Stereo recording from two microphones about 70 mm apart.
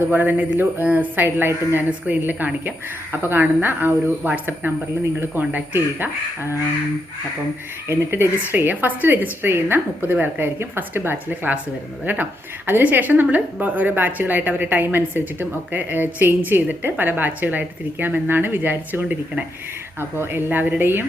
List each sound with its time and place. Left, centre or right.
0.1 s a woman's voice: right
5.7 s a woman's voice: right
7.9 s a woman's voice: right